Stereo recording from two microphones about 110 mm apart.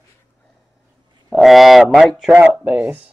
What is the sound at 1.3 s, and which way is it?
Speech, centre (ahead or behind).